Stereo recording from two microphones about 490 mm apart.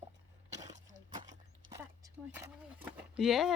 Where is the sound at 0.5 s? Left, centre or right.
Centre.